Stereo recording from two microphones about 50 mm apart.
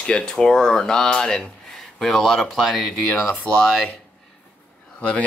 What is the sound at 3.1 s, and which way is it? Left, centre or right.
Speech, left.